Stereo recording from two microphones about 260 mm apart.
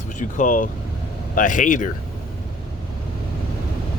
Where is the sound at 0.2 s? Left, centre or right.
Left.